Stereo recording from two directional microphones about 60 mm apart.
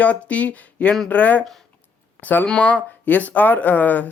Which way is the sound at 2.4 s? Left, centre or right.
Centre.